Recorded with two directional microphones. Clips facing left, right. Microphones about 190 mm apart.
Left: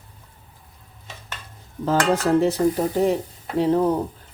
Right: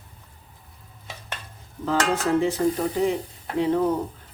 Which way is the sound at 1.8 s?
40° left (ahead or behind).